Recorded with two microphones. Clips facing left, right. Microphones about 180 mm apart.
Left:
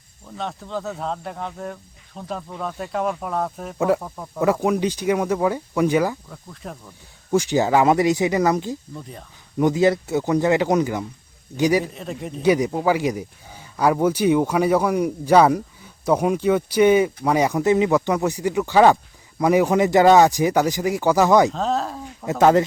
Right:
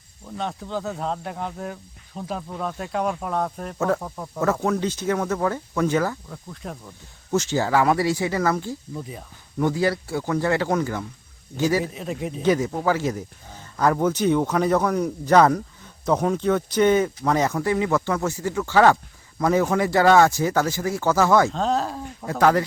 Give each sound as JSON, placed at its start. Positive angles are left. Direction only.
{"t": 0.3, "sound": "speech", "side_deg": 0}
{"t": 3.8, "sound": "speech", "side_deg": 15}
{"t": 4.0, "sound": "speech", "side_deg": 0}
{"t": 4.6, "sound": "speech", "side_deg": 15}
{"t": 6.3, "sound": "speech", "side_deg": 0}
{"t": 7.3, "sound": "speech", "side_deg": 15}
{"t": 9.0, "sound": "speech", "side_deg": -5}
{"t": 9.6, "sound": "speech", "side_deg": 20}
{"t": 11.9, "sound": "speech", "side_deg": 0}
{"t": 12.4, "sound": "speech", "side_deg": 15}
{"t": 21.5, "sound": "speech", "side_deg": 0}
{"t": 22.3, "sound": "speech", "side_deg": 20}